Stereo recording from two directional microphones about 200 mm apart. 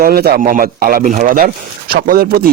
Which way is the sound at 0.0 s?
50° right (ahead or behind).